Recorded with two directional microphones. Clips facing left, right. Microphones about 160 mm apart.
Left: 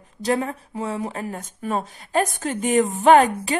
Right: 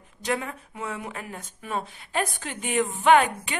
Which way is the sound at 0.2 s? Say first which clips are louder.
Left 6 dB; 35° left (ahead or behind).